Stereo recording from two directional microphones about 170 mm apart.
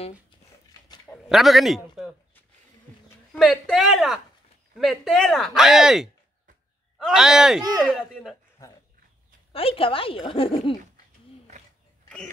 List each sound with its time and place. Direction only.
1.0 s a sound: centre (ahead or behind)
3.3 s speech: centre (ahead or behind)
7.1 s speech: 5° right (ahead or behind)
9.5 s a woman's voice: 35° left (ahead or behind)